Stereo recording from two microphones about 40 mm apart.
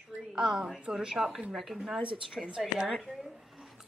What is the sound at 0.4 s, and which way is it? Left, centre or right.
Speech, centre.